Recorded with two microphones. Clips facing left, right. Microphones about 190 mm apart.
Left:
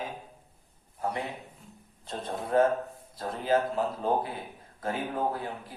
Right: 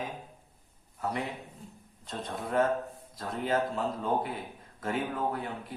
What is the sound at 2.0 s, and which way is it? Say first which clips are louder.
A man's voice: left 2 dB; 30° left (ahead or behind).